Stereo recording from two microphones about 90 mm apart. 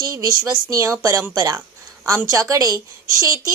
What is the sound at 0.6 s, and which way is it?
A woman's voice, 35° right (ahead or behind).